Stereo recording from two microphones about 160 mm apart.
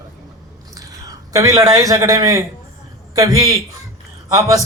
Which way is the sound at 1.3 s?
20° right (ahead or behind).